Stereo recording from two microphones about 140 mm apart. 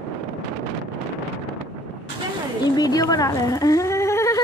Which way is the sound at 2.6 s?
25° left (ahead or behind).